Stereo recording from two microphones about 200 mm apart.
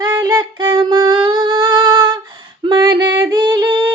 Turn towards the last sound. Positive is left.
turn(degrees=-20)  # may be behind; listen again after turning